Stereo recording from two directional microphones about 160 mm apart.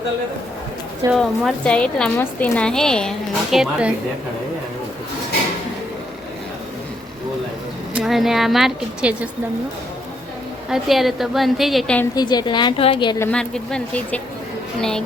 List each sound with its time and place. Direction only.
1.1 s a woman's voice: 5° left (ahead or behind)
7.9 s a woman's voice: centre (ahead or behind)
10.7 s a woman's voice: centre (ahead or behind)
12.1 s a woman's voice: 25° left (ahead or behind)
13.1 s a woman's voice: 10° left (ahead or behind)